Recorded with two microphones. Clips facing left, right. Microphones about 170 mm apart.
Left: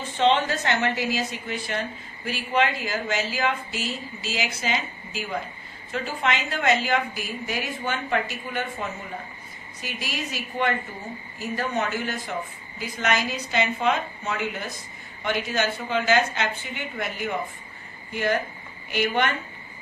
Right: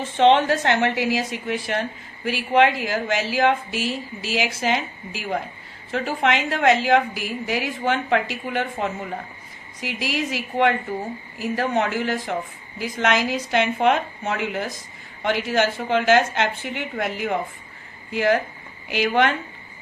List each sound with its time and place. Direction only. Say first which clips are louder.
0.2 s speech: right 5 dB; 75° right (ahead or behind)
9.8 s a woman's voice: right 7 dB; 90° right; by 17.3 s 75° right (ahead or behind)
18.1 s a woman's voice: right 5 dB; 90° right